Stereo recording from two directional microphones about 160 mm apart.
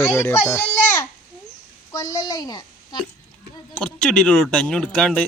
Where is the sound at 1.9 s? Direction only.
25° left (ahead or behind).